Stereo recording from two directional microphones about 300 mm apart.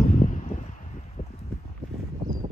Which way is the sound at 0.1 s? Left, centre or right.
Left.